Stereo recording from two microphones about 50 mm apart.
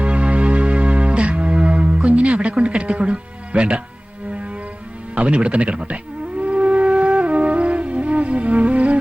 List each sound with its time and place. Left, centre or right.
0.0 s music: right
5.1 s speech: right
6.4 s music: right